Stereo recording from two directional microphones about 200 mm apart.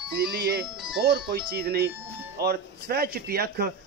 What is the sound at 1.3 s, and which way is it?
Speech, 50° right (ahead or behind).